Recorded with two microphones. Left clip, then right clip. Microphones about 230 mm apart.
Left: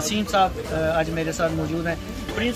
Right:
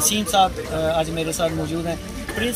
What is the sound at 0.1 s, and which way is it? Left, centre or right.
Speech, centre.